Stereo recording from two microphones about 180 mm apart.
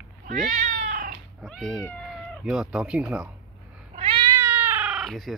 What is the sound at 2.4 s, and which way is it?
Speech, 5° right (ahead or behind).